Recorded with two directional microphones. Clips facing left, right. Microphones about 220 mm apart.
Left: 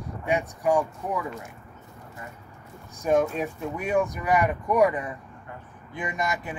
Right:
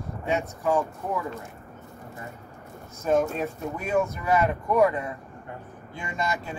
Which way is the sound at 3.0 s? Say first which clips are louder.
Left 1 dB; 15° left (ahead or behind).